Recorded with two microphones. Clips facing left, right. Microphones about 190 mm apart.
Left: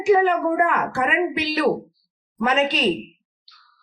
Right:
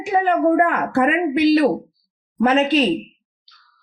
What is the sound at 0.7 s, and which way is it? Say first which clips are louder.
Speech: right 5 dB; 55° right (ahead or behind).